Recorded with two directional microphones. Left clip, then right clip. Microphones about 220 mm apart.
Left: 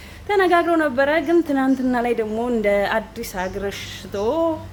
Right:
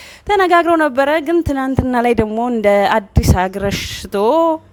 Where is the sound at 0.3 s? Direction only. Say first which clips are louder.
Right 5 dB; 50° right (ahead or behind).